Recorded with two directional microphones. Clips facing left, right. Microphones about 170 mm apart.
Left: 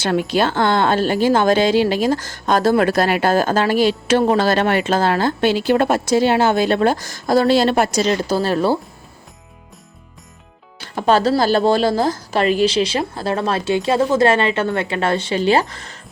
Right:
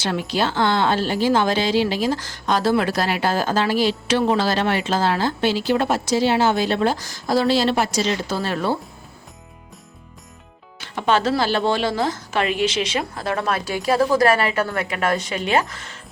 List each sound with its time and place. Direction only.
0.0 s a woman's voice: 50° left (ahead or behind); by 8.8 s 35° left (ahead or behind)
10.8 s speech: 40° left (ahead or behind)